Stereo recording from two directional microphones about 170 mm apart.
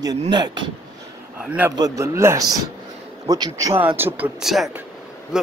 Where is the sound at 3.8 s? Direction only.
10° right (ahead or behind).